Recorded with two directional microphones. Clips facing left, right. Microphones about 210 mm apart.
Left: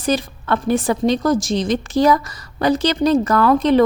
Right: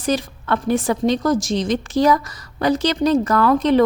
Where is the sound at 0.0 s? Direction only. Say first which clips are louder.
Left 1 dB; 30° left (ahead or behind).